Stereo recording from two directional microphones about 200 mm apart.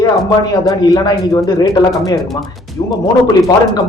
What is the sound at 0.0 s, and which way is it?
Speech, 20° left (ahead or behind).